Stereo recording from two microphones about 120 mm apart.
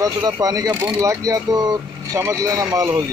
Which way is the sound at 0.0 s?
30° right (ahead or behind).